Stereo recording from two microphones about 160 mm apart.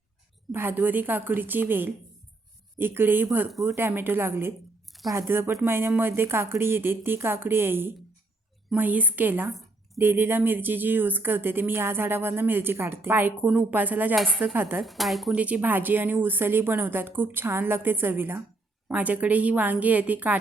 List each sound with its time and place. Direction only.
0.5 s speech: 10° right (ahead or behind)
3.5 s speech: centre (ahead or behind)
3.8 s speech: 15° right (ahead or behind)
9.5 s a sound: centre (ahead or behind)
10.0 s speech: 15° right (ahead or behind)
14.8 s speech: centre (ahead or behind)